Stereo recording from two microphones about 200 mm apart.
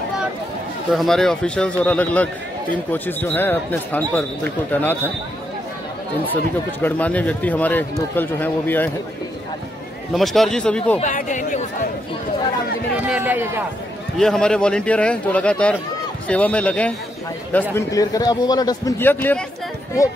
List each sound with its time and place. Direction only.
0.9 s speech: centre (ahead or behind)
6.3 s speech: 10° left (ahead or behind)
10.1 s speech: centre (ahead or behind)
11.0 s speech: 40° left (ahead or behind)
13.0 s a man's voice: 5° right (ahead or behind)
14.1 s speech: centre (ahead or behind)